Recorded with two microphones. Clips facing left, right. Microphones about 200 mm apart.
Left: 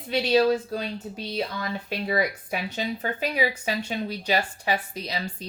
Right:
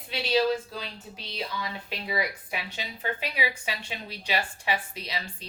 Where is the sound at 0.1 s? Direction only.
50° left (ahead or behind).